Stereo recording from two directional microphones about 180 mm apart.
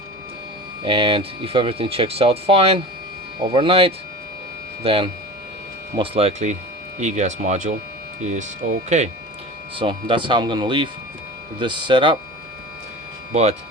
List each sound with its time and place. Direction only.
0.8 s speech: 30° right (ahead or behind)
9.7 s speech: 25° right (ahead or behind)
13.3 s speech: 35° right (ahead or behind)